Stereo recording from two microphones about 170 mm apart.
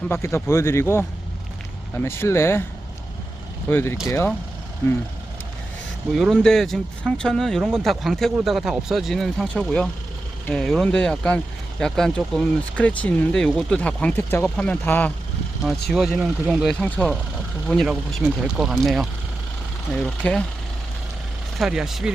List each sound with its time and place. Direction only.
0.1 s speech: 15° left (ahead or behind)
3.7 s speech: 15° left (ahead or behind)
6.1 s speech: centre (ahead or behind)
15.9 s speech: centre (ahead or behind)
21.6 s speech: 5° right (ahead or behind)